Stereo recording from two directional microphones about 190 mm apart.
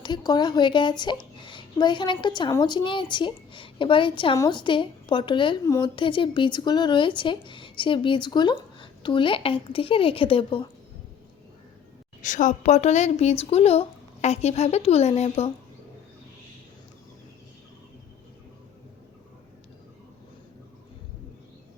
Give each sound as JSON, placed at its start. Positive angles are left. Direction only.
{"t": 0.0, "sound": "a woman's voice", "side_deg": 20}
{"t": 12.2, "sound": "speech", "side_deg": 40}